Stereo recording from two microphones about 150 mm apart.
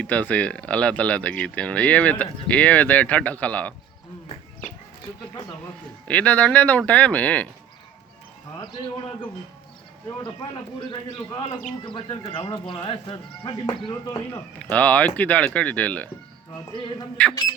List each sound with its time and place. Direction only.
0.0 s speech: 10° left (ahead or behind)
6.1 s speech: 10° left (ahead or behind)
10.8 s speech: 35° left (ahead or behind)
14.6 s speech: 10° left (ahead or behind)
16.7 s speech: 35° left (ahead or behind)